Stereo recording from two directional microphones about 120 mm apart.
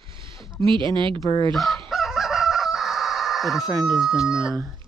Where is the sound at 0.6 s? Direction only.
45° right (ahead or behind).